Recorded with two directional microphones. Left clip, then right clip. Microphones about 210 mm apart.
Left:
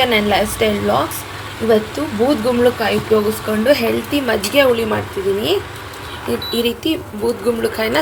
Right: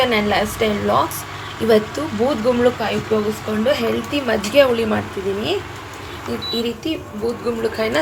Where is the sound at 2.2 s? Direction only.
15° left (ahead or behind).